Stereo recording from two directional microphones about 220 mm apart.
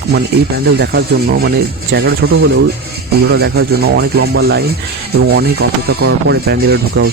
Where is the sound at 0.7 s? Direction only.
50° right (ahead or behind).